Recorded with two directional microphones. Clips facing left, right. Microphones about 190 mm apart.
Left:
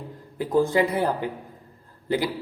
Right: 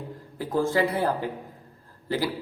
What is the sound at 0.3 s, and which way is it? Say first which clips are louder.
A man's voice: left 3 dB; 15° left (ahead or behind).